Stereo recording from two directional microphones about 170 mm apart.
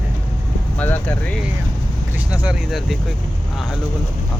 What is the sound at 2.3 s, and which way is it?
Speech, 5° right (ahead or behind).